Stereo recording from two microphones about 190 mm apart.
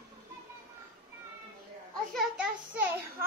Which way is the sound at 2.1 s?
5° right (ahead or behind).